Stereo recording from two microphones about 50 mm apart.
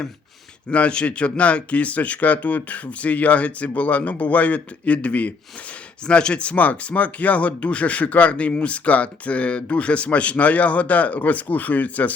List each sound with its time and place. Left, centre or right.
0.7 s speech: left